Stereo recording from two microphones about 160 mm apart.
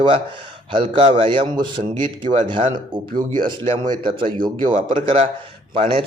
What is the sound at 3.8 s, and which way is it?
Speech, 30° right (ahead or behind).